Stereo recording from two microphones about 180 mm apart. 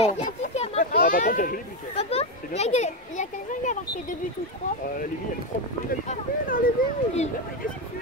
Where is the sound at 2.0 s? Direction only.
35° left (ahead or behind).